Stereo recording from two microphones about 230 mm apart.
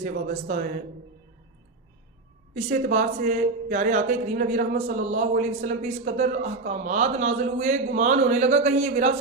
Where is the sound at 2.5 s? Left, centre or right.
Right.